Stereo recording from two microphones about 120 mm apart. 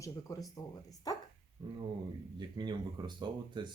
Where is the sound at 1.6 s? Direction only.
40° right (ahead or behind).